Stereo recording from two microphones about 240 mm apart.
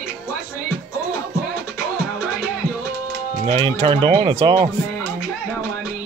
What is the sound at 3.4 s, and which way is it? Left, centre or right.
Speech, right.